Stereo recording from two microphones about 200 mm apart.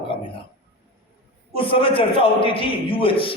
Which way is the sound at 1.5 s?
25° left (ahead or behind).